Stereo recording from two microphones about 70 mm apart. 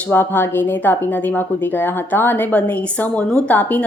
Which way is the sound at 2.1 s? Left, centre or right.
Left.